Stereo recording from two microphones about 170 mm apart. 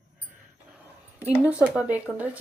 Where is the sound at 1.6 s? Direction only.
10° right (ahead or behind).